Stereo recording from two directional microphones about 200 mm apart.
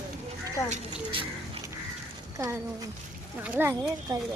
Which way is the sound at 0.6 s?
35° right (ahead or behind).